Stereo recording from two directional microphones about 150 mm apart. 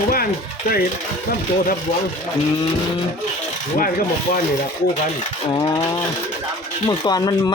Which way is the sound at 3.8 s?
70° left (ahead or behind).